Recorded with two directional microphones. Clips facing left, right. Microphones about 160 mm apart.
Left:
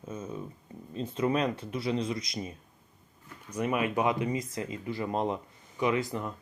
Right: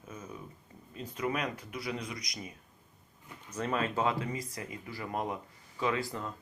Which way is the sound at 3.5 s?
15° left (ahead or behind).